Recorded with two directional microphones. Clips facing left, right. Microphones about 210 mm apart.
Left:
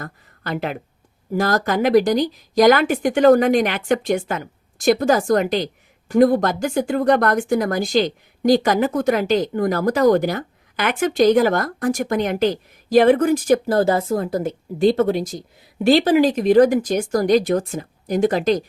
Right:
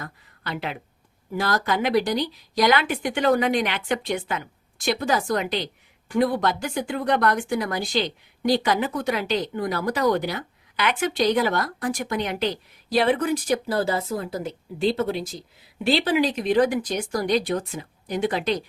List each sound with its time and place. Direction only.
0.0 s a woman's voice: 45° left (ahead or behind)